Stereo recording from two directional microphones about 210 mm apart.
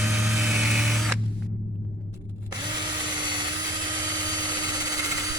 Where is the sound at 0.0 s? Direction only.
Centre (ahead or behind).